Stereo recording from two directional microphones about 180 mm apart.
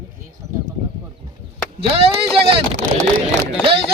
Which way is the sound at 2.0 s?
30° right (ahead or behind).